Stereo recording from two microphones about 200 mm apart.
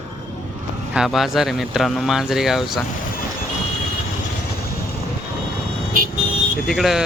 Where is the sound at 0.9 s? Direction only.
Centre (ahead or behind).